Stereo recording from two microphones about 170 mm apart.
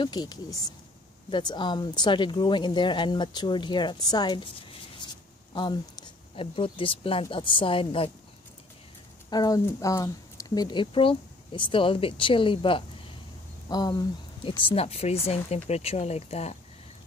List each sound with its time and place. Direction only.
0.0 s speech: 25° left (ahead or behind)
5.5 s speech: 25° left (ahead or behind)
9.3 s speech: 20° left (ahead or behind); by 16.5 s 40° left (ahead or behind)